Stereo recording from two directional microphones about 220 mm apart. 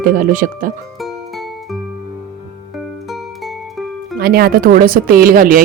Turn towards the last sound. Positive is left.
turn(degrees=-40)  # may be behind; listen again after turning